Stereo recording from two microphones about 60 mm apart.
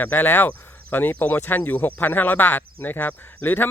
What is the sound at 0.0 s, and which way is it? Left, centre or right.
Speech, left.